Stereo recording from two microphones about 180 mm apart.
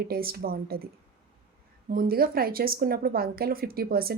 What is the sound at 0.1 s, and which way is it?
Speech, 55° right (ahead or behind).